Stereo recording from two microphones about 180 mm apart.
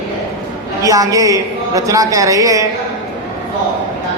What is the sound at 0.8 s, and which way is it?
A man's voice, 20° right (ahead or behind).